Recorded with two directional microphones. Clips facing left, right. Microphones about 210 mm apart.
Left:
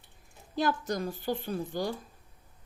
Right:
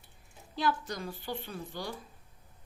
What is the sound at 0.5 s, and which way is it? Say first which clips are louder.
A woman's voice: left 3 dB; 45° left (ahead or behind).